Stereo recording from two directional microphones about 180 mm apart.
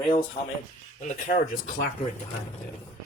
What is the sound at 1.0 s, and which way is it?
Speech, 45° left (ahead or behind).